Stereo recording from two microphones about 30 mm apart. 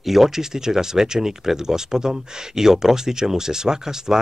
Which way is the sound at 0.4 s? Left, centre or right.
Centre.